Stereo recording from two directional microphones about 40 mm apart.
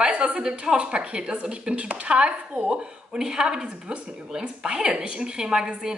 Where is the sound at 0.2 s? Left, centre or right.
Right.